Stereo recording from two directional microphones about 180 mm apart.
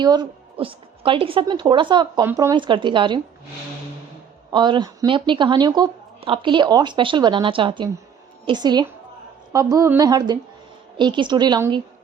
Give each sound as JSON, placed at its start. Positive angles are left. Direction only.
{"t": 0.0, "sound": "speech", "side_deg": -25}
{"t": 4.5, "sound": "speech", "side_deg": -25}